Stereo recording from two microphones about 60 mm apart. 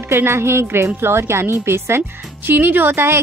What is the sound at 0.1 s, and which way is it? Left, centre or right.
A woman's voice, right.